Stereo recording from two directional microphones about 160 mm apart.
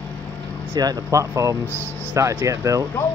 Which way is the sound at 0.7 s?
20° right (ahead or behind).